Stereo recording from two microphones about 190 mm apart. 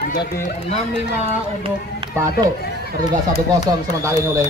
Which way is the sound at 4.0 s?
15° right (ahead or behind).